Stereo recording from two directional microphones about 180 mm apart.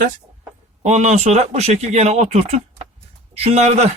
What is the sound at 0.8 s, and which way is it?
Speech, 40° right (ahead or behind).